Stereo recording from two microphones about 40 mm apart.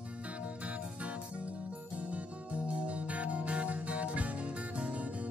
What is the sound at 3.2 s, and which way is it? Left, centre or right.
Music, right.